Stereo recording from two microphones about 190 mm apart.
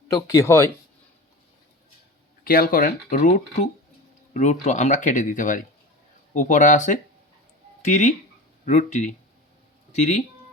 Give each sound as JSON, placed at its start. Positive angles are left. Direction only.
{"t": 0.1, "sound": "speech", "side_deg": 15}
{"t": 2.4, "sound": "speech", "side_deg": 50}
{"t": 4.6, "sound": "speech", "side_deg": 40}